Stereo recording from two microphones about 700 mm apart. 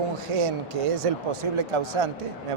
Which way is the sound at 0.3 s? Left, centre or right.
Right.